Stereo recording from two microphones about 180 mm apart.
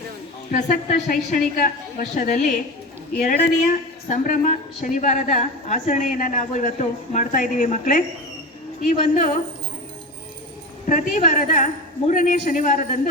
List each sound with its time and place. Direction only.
0.5 s a woman's voice: 45° left (ahead or behind)
4.1 s a woman's voice: 45° left (ahead or behind)
10.8 s a woman's voice: 45° left (ahead or behind)